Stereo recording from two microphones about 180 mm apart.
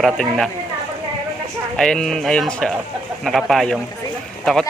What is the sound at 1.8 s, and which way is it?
Speech, 5° left (ahead or behind).